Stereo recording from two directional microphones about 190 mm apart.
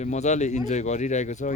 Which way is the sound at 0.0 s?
35° left (ahead or behind).